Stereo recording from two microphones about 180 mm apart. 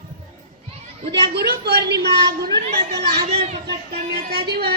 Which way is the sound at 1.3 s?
65° right (ahead or behind).